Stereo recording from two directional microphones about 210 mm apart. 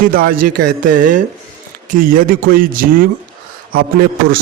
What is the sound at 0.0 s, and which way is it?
A man's voice, 40° right (ahead or behind).